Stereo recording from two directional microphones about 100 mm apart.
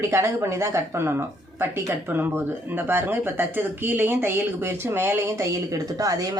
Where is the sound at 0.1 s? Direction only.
30° right (ahead or behind).